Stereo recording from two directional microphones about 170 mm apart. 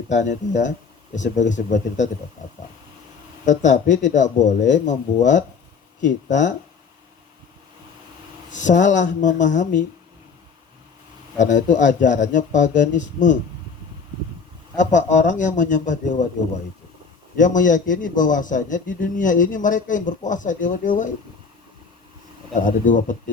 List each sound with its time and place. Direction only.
0.1 s a man's voice: 45° left (ahead or behind)
3.4 s a man's voice: 45° left (ahead or behind)
8.5 s a man's voice: 45° left (ahead or behind)
11.3 s a man's voice: 45° left (ahead or behind)
14.9 s a man's voice: 45° left (ahead or behind)
17.3 s a man's voice: 50° left (ahead or behind)
22.5 s a man's voice: 50° left (ahead or behind)